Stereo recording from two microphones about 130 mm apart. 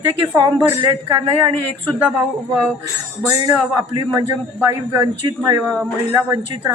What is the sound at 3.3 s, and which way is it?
A man's voice, 25° right (ahead or behind).